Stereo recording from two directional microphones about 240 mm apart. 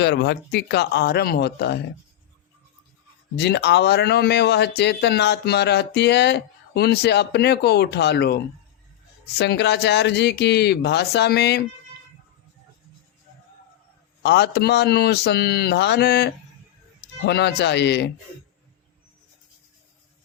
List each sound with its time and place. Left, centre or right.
0.0 s speech: left
3.3 s speech: left
14.2 s speech: left